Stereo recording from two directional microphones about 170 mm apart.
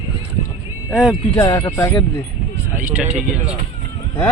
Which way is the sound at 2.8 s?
10° right (ahead or behind).